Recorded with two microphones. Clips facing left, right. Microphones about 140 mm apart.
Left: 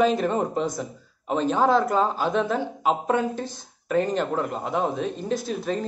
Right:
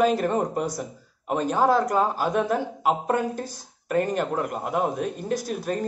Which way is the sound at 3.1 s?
45° right (ahead or behind).